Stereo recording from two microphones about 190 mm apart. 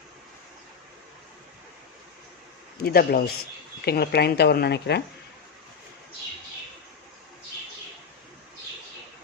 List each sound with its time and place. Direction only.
2.8 s a man's voice: 55° left (ahead or behind)